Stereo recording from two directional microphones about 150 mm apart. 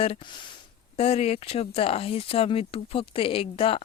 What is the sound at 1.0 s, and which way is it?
Speech, 40° left (ahead or behind).